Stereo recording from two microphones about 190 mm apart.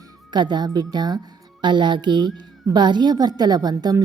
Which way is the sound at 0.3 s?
25° right (ahead or behind).